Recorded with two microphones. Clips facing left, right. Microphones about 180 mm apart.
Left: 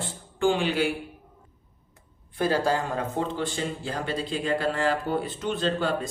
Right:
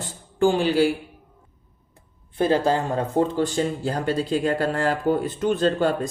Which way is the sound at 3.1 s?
40° right (ahead or behind).